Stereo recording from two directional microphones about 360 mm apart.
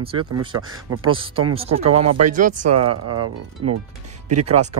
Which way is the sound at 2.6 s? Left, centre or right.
Right.